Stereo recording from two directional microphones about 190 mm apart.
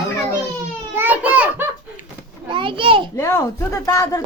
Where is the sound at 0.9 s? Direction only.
10° right (ahead or behind).